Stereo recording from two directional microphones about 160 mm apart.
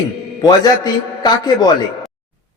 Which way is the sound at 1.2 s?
25° left (ahead or behind).